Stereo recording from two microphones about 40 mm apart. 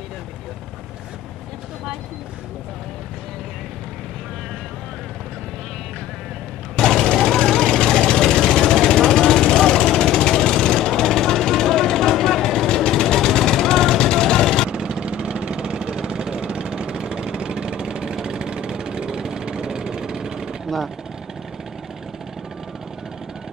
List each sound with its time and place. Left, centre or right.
6.8 s vehicle: centre
14.7 s vehicle: centre